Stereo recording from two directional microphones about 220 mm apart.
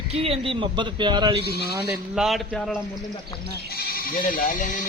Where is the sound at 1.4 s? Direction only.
45° right (ahead or behind).